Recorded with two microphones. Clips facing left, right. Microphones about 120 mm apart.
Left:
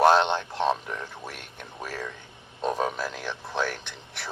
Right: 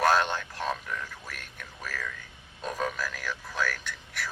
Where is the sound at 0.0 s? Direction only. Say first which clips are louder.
Left 5 dB; 25° left (ahead or behind).